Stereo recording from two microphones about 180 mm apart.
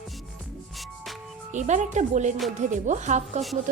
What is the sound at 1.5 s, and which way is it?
Speech, 40° right (ahead or behind).